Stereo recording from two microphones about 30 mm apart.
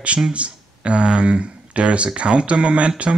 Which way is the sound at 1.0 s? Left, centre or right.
Right.